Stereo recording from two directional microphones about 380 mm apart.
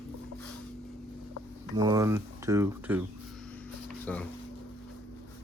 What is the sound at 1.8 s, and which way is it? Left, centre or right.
Speech, centre.